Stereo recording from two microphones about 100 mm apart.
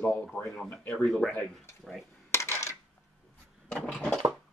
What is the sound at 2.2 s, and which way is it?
Coin, 25° left (ahead or behind).